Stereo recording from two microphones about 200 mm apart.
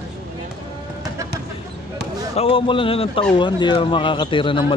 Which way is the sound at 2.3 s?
25° left (ahead or behind).